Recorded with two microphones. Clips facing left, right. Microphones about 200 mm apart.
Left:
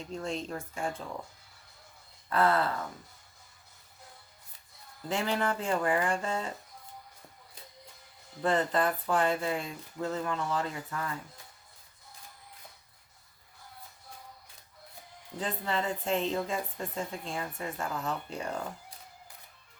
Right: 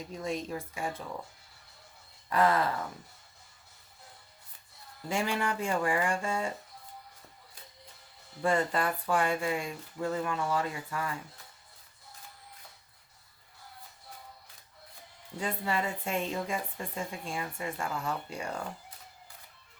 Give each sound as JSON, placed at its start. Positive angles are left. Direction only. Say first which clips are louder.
{"t": 0.0, "sound": "a woman's voice", "louder": "even", "side_deg": -10}
{"t": 2.3, "sound": "a woman's voice", "louder": "even", "side_deg": -15}
{"t": 5.0, "sound": "a woman's voice", "louder": "left 1 dB", "side_deg": -10}
{"t": 8.4, "sound": "a woman's voice", "louder": "left 1 dB", "side_deg": -10}
{"t": 15.4, "sound": "a woman's voice", "louder": "even", "side_deg": -10}